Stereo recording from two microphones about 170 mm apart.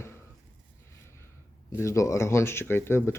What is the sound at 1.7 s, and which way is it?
Speech, 15° left (ahead or behind).